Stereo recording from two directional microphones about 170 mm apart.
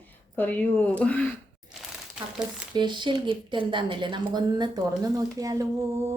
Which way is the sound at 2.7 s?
25° right (ahead or behind).